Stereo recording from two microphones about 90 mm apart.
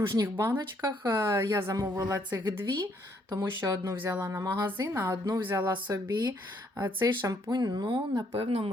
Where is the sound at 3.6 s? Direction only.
35° right (ahead or behind).